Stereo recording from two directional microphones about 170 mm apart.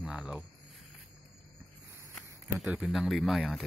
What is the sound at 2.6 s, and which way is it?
Speech, 5° right (ahead or behind).